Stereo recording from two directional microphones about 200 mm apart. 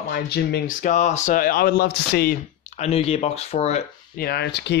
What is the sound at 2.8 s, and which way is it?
Speech, 30° left (ahead or behind).